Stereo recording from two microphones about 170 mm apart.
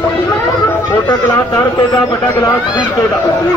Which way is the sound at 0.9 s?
15° left (ahead or behind).